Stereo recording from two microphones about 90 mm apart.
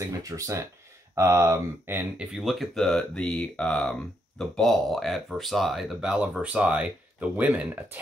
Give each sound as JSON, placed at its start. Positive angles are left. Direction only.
{"t": 0.2, "sound": "speech", "side_deg": -40}
{"t": 1.1, "sound": "speech", "side_deg": -30}
{"t": 2.1, "sound": "speech", "side_deg": 0}